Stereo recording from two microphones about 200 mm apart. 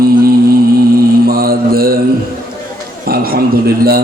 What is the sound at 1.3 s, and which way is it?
Mantra, 50° right (ahead or behind).